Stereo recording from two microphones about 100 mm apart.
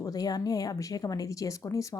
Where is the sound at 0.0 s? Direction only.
40° left (ahead or behind).